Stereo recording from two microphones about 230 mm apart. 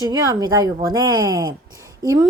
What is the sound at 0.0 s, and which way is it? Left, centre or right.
Speech, centre.